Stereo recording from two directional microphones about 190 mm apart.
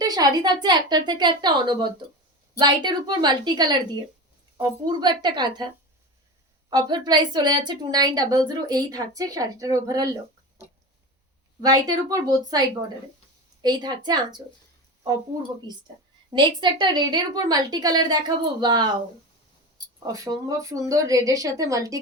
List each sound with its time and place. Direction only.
0.0 s a woman's voice: 20° right (ahead or behind)
11.6 s a woman's voice: 20° right (ahead or behind)
15.7 s a woman's voice: 20° right (ahead or behind)
20.1 s a woman's voice: 20° right (ahead or behind)